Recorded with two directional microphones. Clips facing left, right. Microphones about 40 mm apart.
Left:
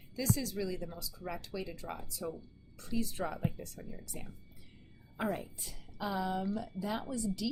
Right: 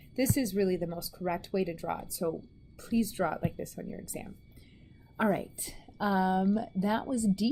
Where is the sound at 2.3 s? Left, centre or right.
Right.